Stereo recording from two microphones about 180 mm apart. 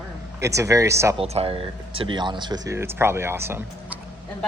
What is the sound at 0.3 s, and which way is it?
Speech, 15° right (ahead or behind).